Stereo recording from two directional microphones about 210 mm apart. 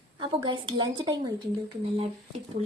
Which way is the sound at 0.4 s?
20° right (ahead or behind).